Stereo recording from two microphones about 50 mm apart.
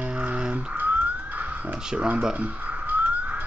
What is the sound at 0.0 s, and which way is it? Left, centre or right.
Crow, right.